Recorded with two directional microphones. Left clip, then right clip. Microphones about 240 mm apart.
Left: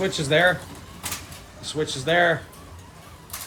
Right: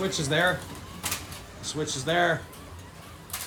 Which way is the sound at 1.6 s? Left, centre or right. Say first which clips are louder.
Left 4 dB; centre.